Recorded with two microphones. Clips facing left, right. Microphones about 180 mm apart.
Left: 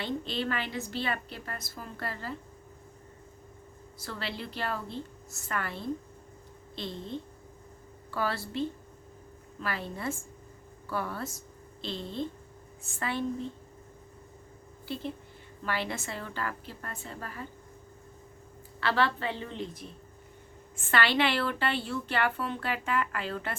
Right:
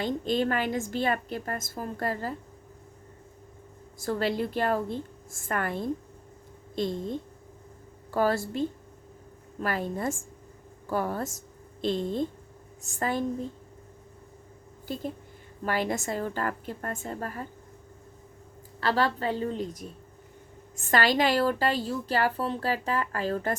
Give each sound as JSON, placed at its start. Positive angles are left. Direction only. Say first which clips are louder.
{"t": 0.0, "sound": "a woman's voice", "louder": "right 6 dB", "side_deg": -45}
{"t": 4.0, "sound": "a woman's voice", "louder": "right 10 dB", "side_deg": -45}
{"t": 14.8, "sound": "a woman's voice", "louder": "right 2 dB", "side_deg": -45}
{"t": 18.8, "sound": "a woman's voice", "louder": "right 2 dB", "side_deg": -40}